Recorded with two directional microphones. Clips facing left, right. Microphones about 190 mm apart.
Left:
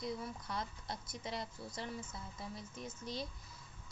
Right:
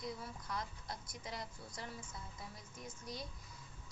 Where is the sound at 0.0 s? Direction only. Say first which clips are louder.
Left 4 dB; 25° left (ahead or behind).